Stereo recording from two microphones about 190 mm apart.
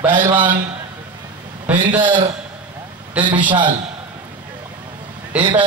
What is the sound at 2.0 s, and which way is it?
Speech, 25° right (ahead or behind).